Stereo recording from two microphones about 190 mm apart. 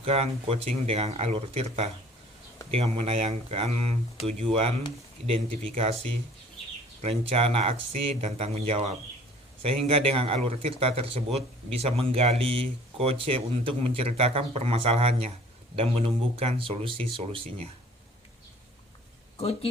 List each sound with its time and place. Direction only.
0.0 s speech: 30° right (ahead or behind)